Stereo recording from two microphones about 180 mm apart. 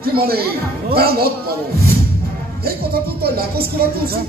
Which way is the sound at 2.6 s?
60° right (ahead or behind).